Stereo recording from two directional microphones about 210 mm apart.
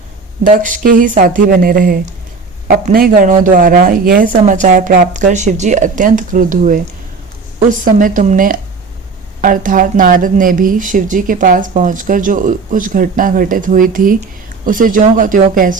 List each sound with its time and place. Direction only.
0.4 s speech: 40° right (ahead or behind)